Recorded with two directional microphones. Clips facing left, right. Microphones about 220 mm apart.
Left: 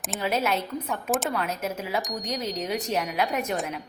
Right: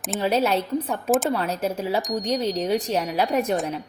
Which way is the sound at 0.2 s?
30° right (ahead or behind).